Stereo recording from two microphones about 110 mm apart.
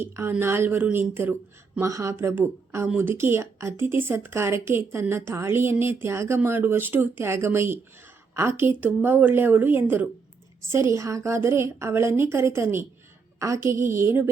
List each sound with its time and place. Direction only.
0.0 s a woman's voice: 20° right (ahead or behind)